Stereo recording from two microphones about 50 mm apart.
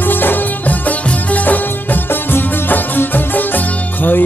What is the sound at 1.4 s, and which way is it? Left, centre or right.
Music, left.